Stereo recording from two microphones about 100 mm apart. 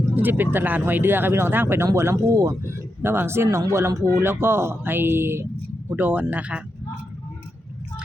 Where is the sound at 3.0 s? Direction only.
25° right (ahead or behind).